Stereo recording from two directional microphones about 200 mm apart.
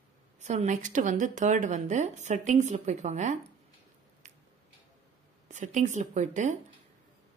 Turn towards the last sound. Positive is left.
turn(degrees=-35)  # may be behind; listen again after turning